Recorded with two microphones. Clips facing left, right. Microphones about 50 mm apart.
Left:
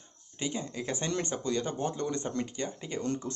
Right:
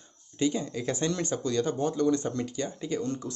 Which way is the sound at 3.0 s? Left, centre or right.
Left.